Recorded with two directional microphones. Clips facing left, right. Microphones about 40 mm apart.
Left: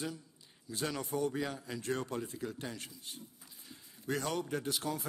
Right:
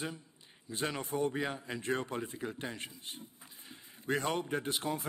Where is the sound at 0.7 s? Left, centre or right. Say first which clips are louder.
Right 1 dB; right.